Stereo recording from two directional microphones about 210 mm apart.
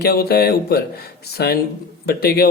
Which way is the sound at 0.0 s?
50° left (ahead or behind).